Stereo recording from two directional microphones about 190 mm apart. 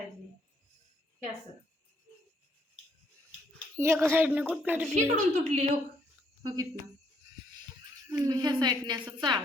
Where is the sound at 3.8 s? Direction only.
10° right (ahead or behind).